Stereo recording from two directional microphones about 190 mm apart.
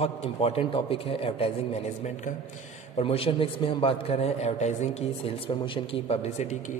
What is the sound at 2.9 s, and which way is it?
A man's voice, 30° left (ahead or behind).